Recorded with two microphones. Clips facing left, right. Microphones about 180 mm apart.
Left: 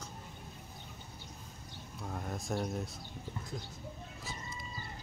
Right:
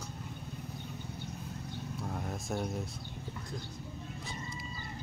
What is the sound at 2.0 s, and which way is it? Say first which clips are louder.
Vehicle: left 1 dB; centre (ahead or behind).